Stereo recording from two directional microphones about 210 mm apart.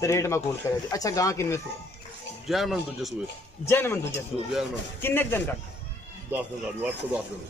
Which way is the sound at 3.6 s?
10° left (ahead or behind).